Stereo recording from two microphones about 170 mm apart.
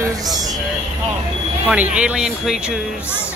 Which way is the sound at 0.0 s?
20° right (ahead or behind).